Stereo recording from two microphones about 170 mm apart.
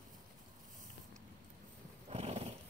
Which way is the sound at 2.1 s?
40° right (ahead or behind).